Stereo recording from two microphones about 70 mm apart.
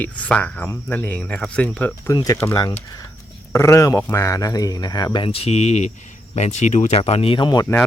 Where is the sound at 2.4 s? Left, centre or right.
Left.